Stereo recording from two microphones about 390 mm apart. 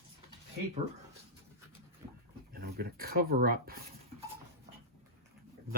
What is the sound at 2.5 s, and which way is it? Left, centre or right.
Speech, right.